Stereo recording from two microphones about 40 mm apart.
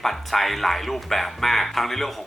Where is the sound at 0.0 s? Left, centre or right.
Centre.